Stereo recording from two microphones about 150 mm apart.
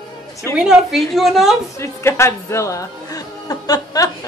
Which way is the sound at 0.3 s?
20° left (ahead or behind).